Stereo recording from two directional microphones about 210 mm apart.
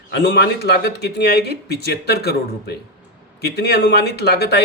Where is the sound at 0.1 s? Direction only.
50° left (ahead or behind).